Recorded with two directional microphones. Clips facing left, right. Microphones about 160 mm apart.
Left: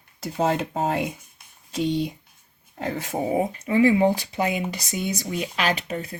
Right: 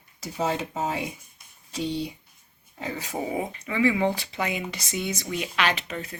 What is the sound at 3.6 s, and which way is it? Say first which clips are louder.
Speech: left 5 dB; 40° left (ahead or behind).